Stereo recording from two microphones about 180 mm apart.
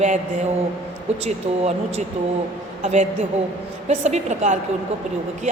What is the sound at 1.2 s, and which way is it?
A man's voice, 35° right (ahead or behind).